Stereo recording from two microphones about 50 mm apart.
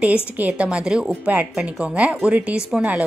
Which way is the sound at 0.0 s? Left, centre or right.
Right.